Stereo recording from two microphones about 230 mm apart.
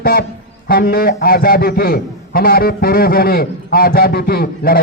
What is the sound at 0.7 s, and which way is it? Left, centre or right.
A man's voice, left.